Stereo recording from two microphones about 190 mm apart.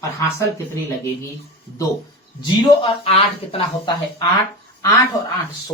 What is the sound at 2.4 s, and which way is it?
Speech, 30° left (ahead or behind).